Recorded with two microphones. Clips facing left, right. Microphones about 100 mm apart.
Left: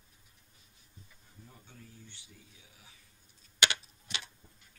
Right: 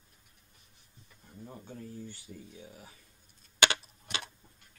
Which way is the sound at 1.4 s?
45° right (ahead or behind).